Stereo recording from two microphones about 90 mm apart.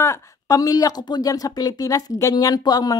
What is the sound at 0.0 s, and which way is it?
Speech, 35° left (ahead or behind).